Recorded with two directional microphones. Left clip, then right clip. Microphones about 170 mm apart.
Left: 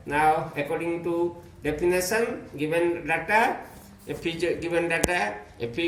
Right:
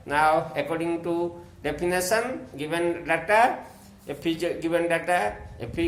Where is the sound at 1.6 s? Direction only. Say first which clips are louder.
Left 1 dB; 55° right (ahead or behind).